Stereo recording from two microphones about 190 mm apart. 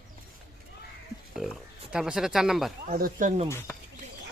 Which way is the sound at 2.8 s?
45° right (ahead or behind).